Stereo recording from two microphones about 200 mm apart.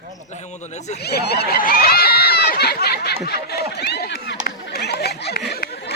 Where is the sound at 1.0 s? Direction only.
55° left (ahead or behind).